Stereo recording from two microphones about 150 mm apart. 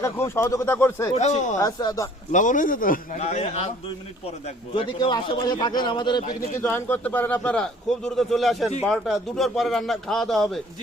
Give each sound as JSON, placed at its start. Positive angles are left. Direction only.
{"t": 0.0, "sound": "a man's voice", "side_deg": 15}
{"t": 1.1, "sound": "a man's voice", "side_deg": 50}
{"t": 1.5, "sound": "speech", "side_deg": 25}
{"t": 2.3, "sound": "a man's voice", "side_deg": 60}
{"t": 3.2, "sound": "a man's voice", "side_deg": 45}
{"t": 4.7, "sound": "a man's voice", "side_deg": 30}
{"t": 6.6, "sound": "a man's voice", "side_deg": 15}